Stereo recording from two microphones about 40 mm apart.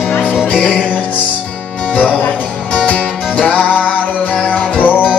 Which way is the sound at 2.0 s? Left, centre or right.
Left.